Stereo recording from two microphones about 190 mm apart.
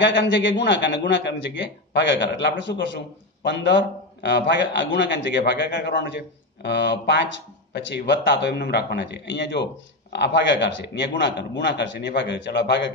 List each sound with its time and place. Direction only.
0.0 s a man's voice: 65° left (ahead or behind)